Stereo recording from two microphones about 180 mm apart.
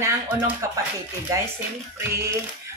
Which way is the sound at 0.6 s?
15° right (ahead or behind).